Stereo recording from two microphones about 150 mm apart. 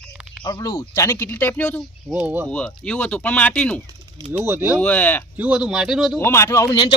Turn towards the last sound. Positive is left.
turn(degrees=30)  # may be behind; listen again after turning